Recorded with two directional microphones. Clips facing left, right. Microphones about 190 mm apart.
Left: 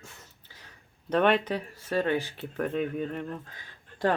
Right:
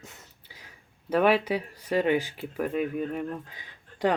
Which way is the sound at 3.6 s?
15° right (ahead or behind).